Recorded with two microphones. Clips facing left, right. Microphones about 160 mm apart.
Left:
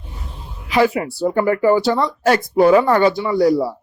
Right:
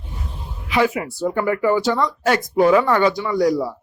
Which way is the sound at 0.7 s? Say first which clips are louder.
Left 3 dB; 35° left (ahead or behind).